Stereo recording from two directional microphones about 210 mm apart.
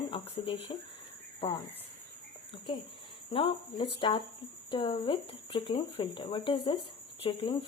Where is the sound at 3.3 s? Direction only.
25° left (ahead or behind).